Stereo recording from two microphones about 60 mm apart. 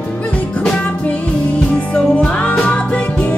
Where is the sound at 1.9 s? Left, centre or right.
Centre.